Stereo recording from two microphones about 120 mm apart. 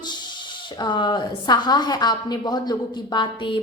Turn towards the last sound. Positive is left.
turn(degrees=40)  # may be behind; listen again after turning